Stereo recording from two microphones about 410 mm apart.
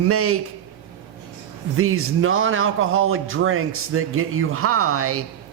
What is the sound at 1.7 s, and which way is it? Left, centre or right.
Speech, right.